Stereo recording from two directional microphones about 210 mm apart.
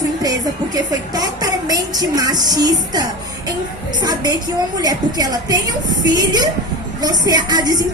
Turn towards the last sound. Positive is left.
turn(degrees=-20)  # may be behind; listen again after turning